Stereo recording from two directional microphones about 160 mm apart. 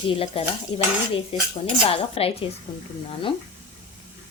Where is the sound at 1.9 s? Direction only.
40° left (ahead or behind).